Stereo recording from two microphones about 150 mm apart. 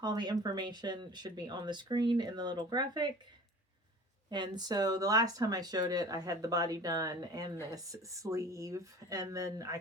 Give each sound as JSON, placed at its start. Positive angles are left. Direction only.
{"t": 0.0, "sound": "speech", "side_deg": -30}
{"t": 4.3, "sound": "speech", "side_deg": -30}